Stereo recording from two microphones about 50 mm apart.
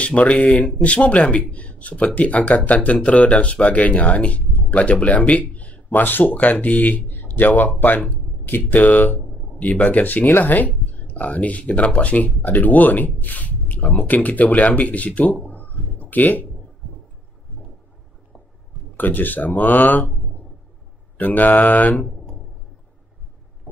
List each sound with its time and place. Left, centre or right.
0.0 s speech: left
5.9 s speech: left
15.4 s a sound: left
18.9 s speech: left
21.2 s speech: left